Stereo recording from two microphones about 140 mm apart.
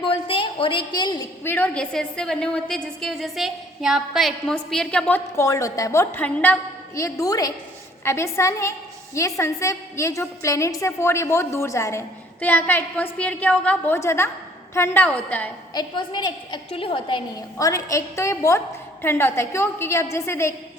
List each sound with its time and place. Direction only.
0.0 s a woman's voice: 40° left (ahead or behind)
1.5 s a woman's voice: 15° left (ahead or behind)
5.4 s a woman's voice: 20° left (ahead or behind)
15.7 s a woman's voice: 30° left (ahead or behind)
17.6 s a woman's voice: 20° left (ahead or behind)